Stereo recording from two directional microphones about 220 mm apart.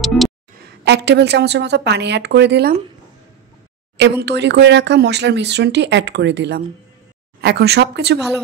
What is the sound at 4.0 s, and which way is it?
Speech, 50° right (ahead or behind).